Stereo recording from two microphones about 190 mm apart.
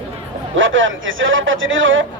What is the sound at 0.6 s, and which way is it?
A man's voice, 90° right.